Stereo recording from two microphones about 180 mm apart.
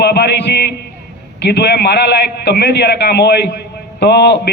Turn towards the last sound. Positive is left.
turn(degrees=70)  # may be behind; listen again after turning